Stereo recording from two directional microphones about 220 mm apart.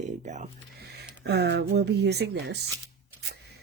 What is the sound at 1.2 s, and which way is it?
Speech, 50° right (ahead or behind).